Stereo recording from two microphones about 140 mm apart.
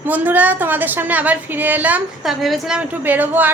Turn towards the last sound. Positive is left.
turn(degrees=-15)  # may be behind; listen again after turning